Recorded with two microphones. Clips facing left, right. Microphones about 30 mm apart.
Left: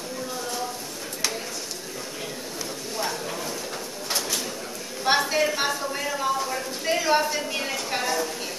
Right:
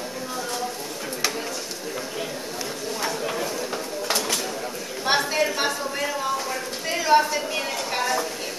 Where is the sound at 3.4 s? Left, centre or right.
Centre.